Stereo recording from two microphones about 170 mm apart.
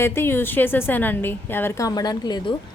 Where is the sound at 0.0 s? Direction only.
15° left (ahead or behind).